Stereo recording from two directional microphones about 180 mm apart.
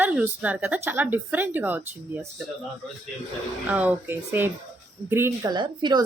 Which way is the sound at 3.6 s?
10° right (ahead or behind).